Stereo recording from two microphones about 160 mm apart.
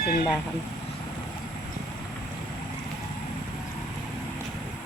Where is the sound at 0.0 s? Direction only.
70° left (ahead or behind).